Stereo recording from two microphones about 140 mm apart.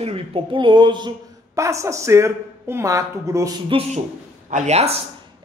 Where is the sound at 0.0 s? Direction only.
40° right (ahead or behind).